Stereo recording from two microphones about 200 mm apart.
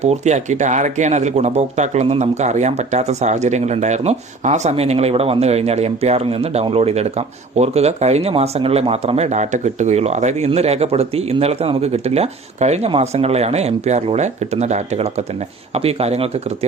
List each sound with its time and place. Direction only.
0.0 s speech: 35° right (ahead or behind)